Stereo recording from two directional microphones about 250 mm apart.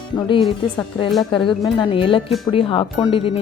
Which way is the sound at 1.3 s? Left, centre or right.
Centre.